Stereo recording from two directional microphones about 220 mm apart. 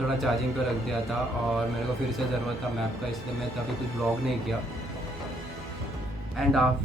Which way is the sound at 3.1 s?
Centre (ahead or behind).